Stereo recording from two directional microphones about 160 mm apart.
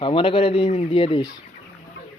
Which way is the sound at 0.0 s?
30° left (ahead or behind).